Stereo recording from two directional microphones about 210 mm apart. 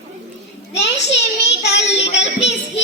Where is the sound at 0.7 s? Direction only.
55° left (ahead or behind).